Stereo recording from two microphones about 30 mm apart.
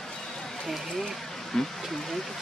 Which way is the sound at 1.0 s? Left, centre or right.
Centre.